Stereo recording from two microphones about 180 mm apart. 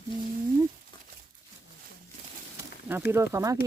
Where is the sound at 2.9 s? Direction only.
10° right (ahead or behind).